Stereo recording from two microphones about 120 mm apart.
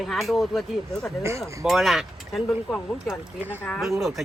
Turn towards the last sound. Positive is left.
turn(degrees=0)  # may be behind; listen again after turning